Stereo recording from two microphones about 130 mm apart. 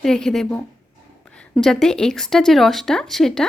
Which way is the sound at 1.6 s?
5° left (ahead or behind).